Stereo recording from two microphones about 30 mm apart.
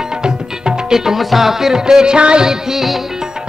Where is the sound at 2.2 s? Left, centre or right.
Right.